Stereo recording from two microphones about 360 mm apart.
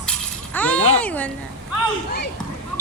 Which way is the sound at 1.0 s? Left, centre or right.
Centre.